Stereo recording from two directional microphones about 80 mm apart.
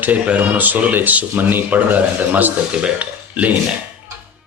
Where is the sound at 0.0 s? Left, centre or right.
Centre.